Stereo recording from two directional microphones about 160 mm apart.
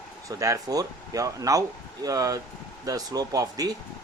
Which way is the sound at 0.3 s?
20° right (ahead or behind).